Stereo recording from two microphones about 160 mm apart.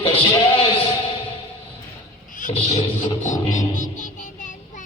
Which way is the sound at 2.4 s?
50° left (ahead or behind).